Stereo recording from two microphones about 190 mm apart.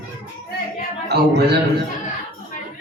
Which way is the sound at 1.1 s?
60° right (ahead or behind).